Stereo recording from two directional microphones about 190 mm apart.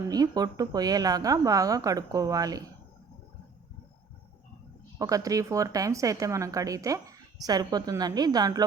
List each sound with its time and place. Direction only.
0.1 s a woman's voice: 20° right (ahead or behind)
4.9 s a woman's voice: 20° right (ahead or behind)